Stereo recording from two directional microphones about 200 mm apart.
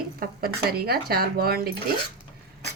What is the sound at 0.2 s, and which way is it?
A man's voice, 50° right (ahead or behind).